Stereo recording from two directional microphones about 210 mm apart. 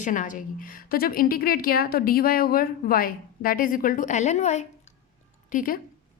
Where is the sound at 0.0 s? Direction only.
40° left (ahead or behind).